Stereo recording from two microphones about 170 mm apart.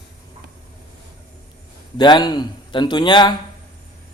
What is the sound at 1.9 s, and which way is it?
Speech, 25° left (ahead or behind).